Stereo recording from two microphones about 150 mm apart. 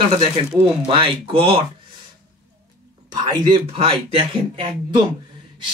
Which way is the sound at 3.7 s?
40° right (ahead or behind).